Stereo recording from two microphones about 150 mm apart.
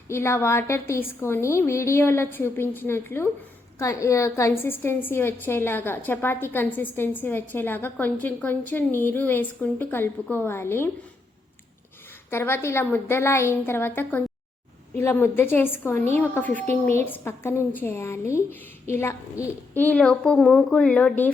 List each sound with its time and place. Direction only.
0.1 s a woman's voice: 15° left (ahead or behind)
12.3 s a woman's voice: 15° left (ahead or behind)